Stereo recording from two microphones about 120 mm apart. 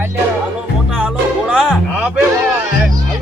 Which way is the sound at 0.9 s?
5° right (ahead or behind).